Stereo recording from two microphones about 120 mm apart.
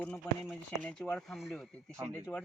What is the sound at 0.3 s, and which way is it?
A man's voice, 15° left (ahead or behind).